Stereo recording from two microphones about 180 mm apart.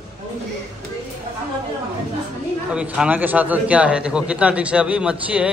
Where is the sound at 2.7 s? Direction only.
5° right (ahead or behind).